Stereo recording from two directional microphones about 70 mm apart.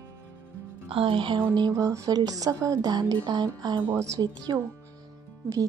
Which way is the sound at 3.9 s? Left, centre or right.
Right.